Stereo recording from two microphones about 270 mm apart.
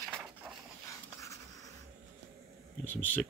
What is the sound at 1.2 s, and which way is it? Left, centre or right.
Writing, centre.